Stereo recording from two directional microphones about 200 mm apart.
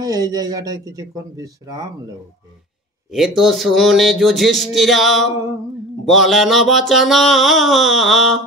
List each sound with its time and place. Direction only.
0.0 s speech: 20° right (ahead or behind)
3.1 s mantra: centre (ahead or behind)